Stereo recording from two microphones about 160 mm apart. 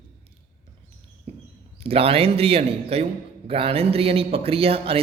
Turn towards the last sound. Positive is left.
turn(degrees=-35)  # may be behind; listen again after turning